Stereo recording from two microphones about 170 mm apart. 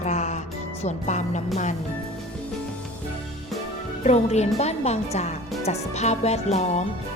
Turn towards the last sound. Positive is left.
turn(degrees=40)  # may be behind; listen again after turning